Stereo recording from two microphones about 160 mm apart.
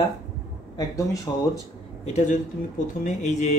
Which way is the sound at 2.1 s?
50° left (ahead or behind).